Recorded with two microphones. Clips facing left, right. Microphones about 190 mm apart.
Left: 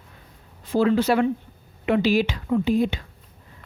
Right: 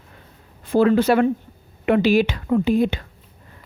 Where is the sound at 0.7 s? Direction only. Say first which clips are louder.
Right 4 dB; 55° right (ahead or behind).